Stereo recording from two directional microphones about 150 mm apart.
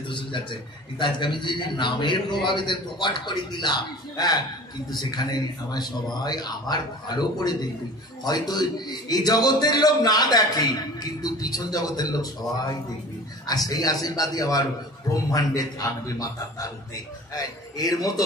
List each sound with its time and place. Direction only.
0.1 s a man's voice: 30° left (ahead or behind)
13.5 s a man's voice: 25° left (ahead or behind)